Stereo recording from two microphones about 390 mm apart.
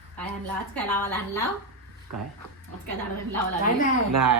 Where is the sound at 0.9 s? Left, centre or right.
Centre.